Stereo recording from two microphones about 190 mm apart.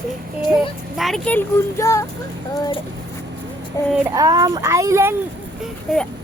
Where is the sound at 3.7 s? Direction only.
20° left (ahead or behind).